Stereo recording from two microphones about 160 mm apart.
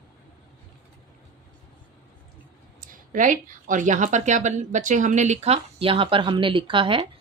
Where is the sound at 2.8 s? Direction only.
55° right (ahead or behind); by 7.0 s 30° right (ahead or behind).